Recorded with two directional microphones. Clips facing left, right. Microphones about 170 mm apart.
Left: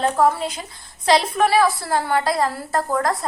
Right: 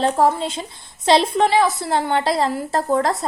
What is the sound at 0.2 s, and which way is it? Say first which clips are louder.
Speech: right 1 dB; 25° right (ahead or behind).